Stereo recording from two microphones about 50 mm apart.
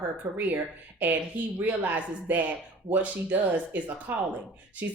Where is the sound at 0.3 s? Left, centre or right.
Right.